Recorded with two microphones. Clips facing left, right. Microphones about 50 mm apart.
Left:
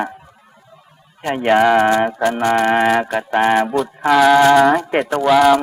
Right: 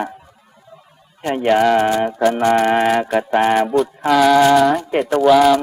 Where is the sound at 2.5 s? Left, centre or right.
Centre.